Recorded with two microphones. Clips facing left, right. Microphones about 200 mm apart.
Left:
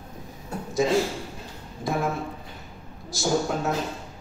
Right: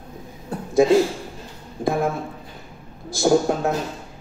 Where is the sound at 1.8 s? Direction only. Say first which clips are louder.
Right 6 dB; 50° right (ahead or behind).